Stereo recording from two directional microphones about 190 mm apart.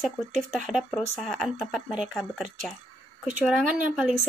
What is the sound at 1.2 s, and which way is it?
Speech, centre (ahead or behind).